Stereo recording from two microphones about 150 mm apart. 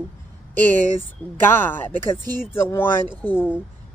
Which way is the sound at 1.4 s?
15° left (ahead or behind).